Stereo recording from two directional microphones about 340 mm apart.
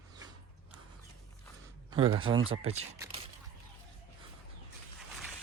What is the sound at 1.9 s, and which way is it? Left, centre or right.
A man's voice, centre.